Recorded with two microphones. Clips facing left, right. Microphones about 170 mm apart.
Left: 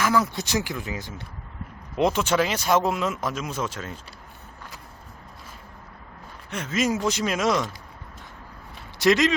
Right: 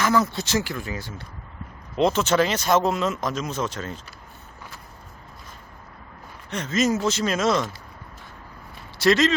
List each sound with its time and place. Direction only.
0.0 s speech: 10° left (ahead or behind)
6.5 s speech: 10° left (ahead or behind)
9.0 s speech: 15° left (ahead or behind)